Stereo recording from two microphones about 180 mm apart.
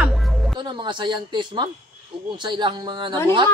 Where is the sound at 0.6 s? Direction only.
25° right (ahead or behind).